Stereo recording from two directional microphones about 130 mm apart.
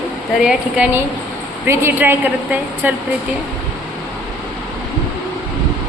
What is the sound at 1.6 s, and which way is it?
A woman's voice, 20° right (ahead or behind).